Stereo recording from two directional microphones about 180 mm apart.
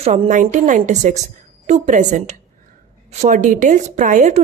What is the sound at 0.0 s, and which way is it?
A woman's voice, 35° right (ahead or behind).